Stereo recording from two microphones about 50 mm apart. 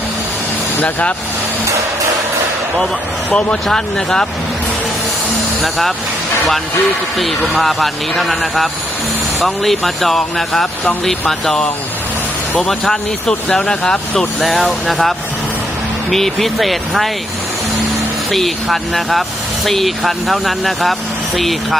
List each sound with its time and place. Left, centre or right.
0.8 s speech: left
2.7 s speech: centre
3.3 s speech: centre
5.6 s speech: centre
7.2 s speech: centre
14.4 s speech: centre
18.3 s speech: centre